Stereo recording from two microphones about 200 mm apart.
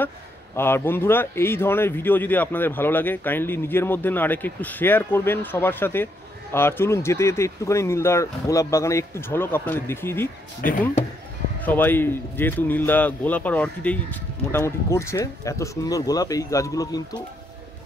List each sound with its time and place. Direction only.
0.6 s a man's voice: 10° left (ahead or behind)
10.6 s speech: 45° left (ahead or behind)
11.6 s a man's voice: 10° left (ahead or behind)